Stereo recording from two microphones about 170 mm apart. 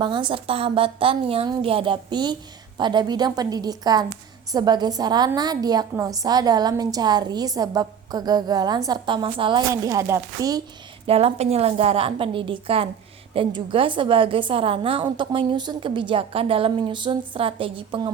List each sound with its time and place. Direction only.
0.0 s a woman's voice: 30° right (ahead or behind)
11.0 s a woman's voice: 35° right (ahead or behind)